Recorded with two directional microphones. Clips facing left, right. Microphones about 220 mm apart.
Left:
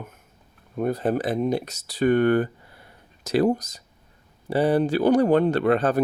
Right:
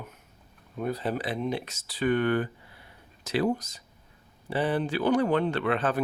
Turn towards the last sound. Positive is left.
turn(degrees=40)  # may be behind; listen again after turning